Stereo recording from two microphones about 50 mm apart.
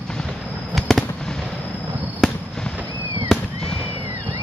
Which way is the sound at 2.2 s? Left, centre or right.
Centre.